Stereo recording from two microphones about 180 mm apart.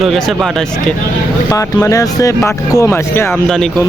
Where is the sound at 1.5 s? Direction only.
15° left (ahead or behind).